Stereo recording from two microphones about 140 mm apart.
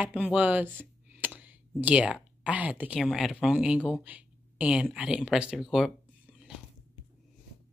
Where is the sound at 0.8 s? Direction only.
10° right (ahead or behind).